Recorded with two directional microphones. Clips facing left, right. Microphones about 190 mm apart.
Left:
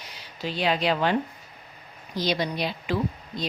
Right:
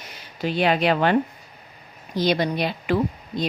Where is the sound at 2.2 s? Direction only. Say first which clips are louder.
Right 5 dB; 55° right (ahead or behind).